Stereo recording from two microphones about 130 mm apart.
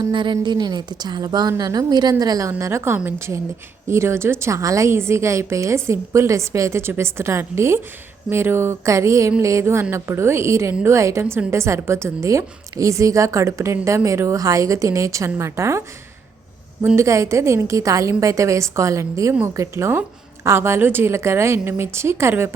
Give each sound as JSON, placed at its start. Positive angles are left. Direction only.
{"t": 0.1, "sound": "a woman's voice", "side_deg": -35}
{"t": 16.8, "sound": "a woman's voice", "side_deg": -20}